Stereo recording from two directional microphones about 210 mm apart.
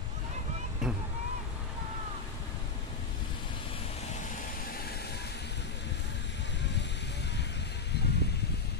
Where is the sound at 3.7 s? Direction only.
30° left (ahead or behind); by 5.6 s 55° left (ahead or behind).